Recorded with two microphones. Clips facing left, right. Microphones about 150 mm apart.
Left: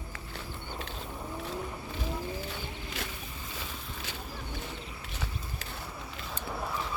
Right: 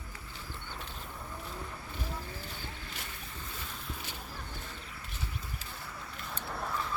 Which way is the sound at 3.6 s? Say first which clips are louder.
Left 2 dB; 90° left.